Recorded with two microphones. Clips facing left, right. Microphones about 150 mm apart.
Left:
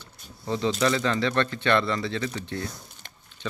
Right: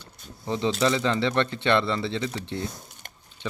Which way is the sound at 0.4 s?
20° right (ahead or behind).